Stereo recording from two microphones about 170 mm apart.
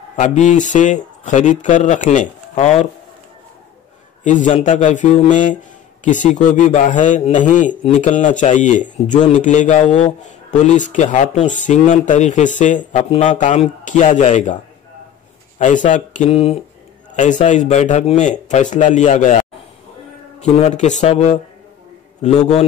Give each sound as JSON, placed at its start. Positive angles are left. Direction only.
{"t": 0.1, "sound": "a man's voice", "side_deg": 45}
{"t": 4.2, "sound": "a man's voice", "side_deg": 45}
{"t": 15.6, "sound": "a man's voice", "side_deg": 45}